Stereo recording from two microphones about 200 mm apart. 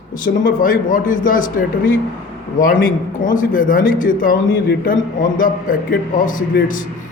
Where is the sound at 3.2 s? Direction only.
40° left (ahead or behind).